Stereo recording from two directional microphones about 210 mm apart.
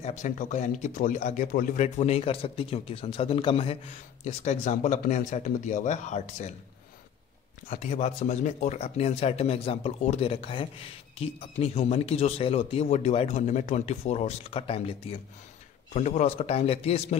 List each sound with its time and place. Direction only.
0.0 s speech: 35° left (ahead or behind)
7.7 s a man's voice: 35° left (ahead or behind)